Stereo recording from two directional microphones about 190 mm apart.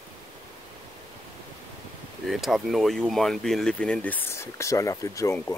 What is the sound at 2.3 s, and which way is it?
Speech, centre (ahead or behind).